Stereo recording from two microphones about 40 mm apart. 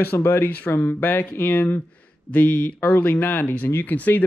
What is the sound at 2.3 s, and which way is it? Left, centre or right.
Speech, left.